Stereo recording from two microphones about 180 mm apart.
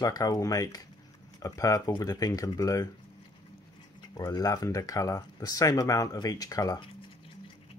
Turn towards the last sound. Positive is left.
turn(degrees=25)  # may be behind; listen again after turning